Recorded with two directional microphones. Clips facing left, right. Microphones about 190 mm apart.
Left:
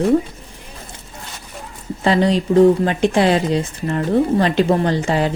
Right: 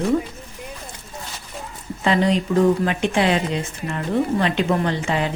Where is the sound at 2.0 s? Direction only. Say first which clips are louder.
Left 3 dB; 35° left (ahead or behind).